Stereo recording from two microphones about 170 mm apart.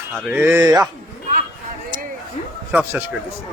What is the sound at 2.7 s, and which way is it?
Speech, 10° right (ahead or behind).